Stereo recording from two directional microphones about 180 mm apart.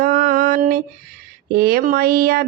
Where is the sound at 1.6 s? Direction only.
55° right (ahead or behind).